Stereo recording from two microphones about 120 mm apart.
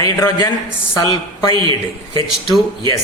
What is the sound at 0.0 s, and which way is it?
Speech, 30° left (ahead or behind).